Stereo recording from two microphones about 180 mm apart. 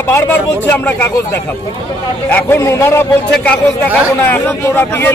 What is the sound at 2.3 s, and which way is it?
A man's voice, 15° left (ahead or behind).